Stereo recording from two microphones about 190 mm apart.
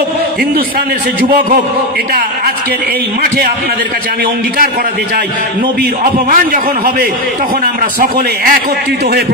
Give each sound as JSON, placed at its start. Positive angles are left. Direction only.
{"t": 5.8, "sound": "a man's voice", "side_deg": -45}